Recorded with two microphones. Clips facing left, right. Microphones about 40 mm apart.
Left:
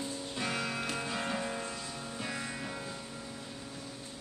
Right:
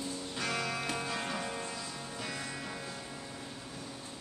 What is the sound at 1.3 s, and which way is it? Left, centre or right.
Music, centre.